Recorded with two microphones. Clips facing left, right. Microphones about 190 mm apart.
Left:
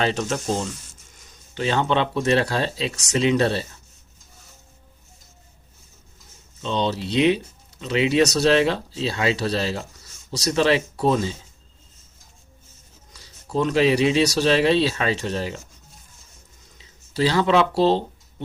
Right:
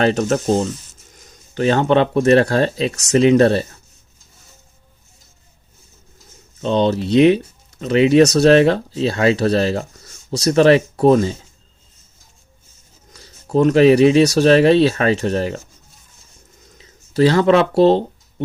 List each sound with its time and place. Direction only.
0.0 s speech: 45° right (ahead or behind)
6.6 s speech: 50° right (ahead or behind)
13.1 s speech: 50° right (ahead or behind)
16.7 s a sound: 50° right (ahead or behind)